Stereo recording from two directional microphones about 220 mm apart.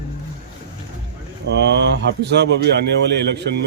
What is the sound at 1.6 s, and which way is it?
Speech, 50° right (ahead or behind).